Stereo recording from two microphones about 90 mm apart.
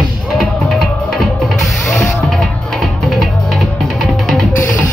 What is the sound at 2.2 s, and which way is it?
Music, centre (ahead or behind).